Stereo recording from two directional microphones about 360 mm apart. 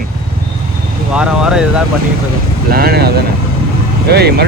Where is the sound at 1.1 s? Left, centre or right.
Centre.